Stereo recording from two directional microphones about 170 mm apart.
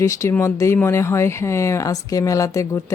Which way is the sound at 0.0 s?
15° left (ahead or behind).